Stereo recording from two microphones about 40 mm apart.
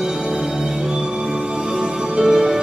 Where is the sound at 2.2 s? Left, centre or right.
Centre.